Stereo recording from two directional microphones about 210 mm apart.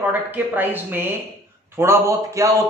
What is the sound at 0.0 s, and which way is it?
Speech, 10° right (ahead or behind).